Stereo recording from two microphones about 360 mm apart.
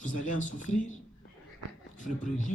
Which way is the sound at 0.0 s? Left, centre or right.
Left.